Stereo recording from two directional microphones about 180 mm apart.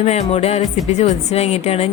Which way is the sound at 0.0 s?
35° left (ahead or behind).